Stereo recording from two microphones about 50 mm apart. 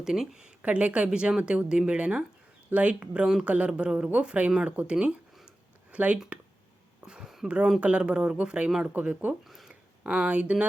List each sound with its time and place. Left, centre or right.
0.0 s speech: centre; by 3.7 s right
3.7 s speech: centre
7.0 s a sound: centre
7.4 s speech: right
9.4 s speech: centre
9.6 s speech: centre